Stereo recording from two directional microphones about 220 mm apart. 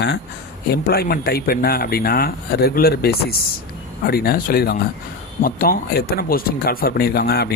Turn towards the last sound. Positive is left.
turn(degrees=45)  # may be behind; listen again after turning